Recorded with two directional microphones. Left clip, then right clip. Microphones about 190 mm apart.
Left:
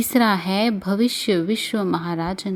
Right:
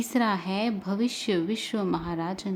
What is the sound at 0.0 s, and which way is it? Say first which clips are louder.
Speech: left 7 dB; 25° left (ahead or behind).